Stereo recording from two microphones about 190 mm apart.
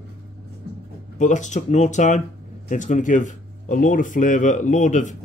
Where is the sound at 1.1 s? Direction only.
40° left (ahead or behind).